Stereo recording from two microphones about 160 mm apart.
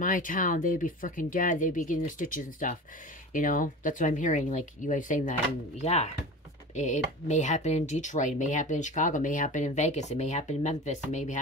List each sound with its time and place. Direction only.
0.0 s speech: 55° left (ahead or behind)
5.8 s speech: 40° left (ahead or behind)